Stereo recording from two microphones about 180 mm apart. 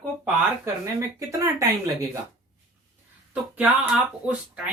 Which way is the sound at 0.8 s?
15° right (ahead or behind).